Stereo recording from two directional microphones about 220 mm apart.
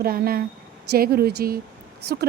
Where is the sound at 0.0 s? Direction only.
40° right (ahead or behind).